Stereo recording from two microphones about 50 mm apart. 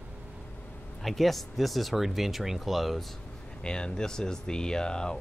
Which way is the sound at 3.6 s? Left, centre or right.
Centre.